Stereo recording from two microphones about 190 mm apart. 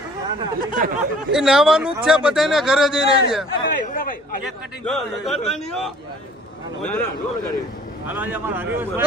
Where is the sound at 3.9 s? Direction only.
45° left (ahead or behind).